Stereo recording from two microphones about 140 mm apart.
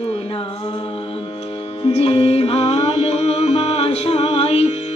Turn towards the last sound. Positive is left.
turn(degrees=50)  # may be behind; listen again after turning